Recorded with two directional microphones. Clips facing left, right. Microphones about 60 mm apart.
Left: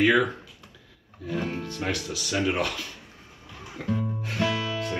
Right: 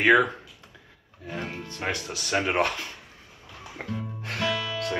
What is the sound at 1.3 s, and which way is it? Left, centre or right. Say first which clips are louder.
Speech: left 4 dB; right.